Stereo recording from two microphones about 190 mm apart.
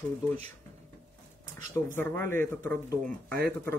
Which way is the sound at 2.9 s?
55° right (ahead or behind).